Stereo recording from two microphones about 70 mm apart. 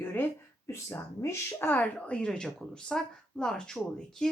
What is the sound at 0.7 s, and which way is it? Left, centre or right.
Speech, left.